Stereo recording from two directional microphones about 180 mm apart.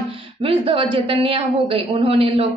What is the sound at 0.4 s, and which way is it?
A woman's voice, 30° right (ahead or behind).